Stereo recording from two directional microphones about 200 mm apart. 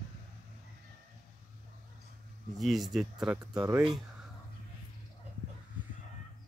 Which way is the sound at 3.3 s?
15° right (ahead or behind).